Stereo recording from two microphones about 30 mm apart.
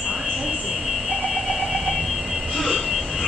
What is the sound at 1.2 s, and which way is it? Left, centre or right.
Alarm, centre.